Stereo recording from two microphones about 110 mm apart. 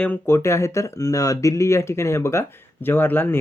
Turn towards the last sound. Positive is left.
turn(degrees=20)  # may be behind; listen again after turning